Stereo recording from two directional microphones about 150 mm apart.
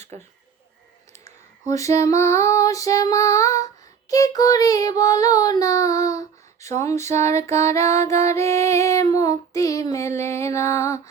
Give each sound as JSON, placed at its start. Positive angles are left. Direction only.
{"t": 1.6, "sound": "music", "side_deg": 20}